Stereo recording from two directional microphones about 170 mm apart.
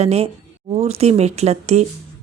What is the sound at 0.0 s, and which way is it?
A woman's voice, 35° right (ahead or behind).